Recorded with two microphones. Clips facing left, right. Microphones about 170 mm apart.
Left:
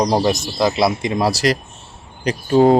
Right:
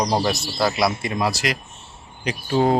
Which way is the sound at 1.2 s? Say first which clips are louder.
Left 6 dB; 40° left (ahead or behind).